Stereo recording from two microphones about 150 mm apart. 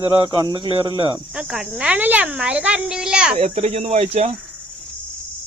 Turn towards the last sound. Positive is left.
turn(degrees=-45)  # may be behind; listen again after turning